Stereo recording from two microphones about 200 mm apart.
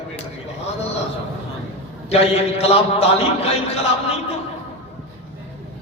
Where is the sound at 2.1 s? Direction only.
30° left (ahead or behind).